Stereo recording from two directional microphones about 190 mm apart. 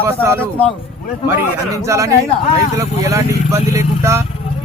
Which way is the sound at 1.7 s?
15° right (ahead or behind).